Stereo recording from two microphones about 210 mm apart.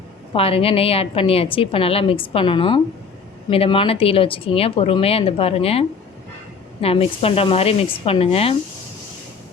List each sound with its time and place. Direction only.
0.3 s a woman's voice: 25° left (ahead or behind)
6.8 s a woman's voice: 25° left (ahead or behind)